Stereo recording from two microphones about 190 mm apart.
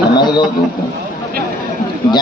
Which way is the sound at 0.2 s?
25° left (ahead or behind).